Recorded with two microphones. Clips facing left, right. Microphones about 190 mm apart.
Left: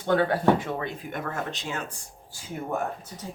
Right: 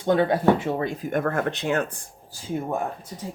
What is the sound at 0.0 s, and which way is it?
Speech, 15° right (ahead or behind).